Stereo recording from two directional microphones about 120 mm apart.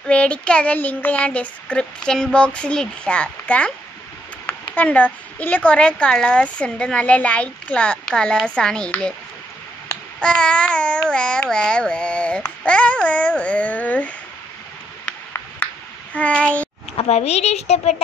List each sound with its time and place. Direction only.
0.0 s a woman's voice: 10° left (ahead or behind)
10.2 s a woman's voice: 10° left (ahead or behind)
15.3 s a sound: 15° left (ahead or behind)
16.9 s a child's voice: 55° left (ahead or behind)